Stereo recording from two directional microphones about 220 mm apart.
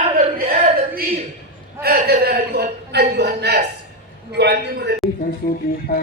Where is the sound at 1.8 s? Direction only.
45° right (ahead or behind).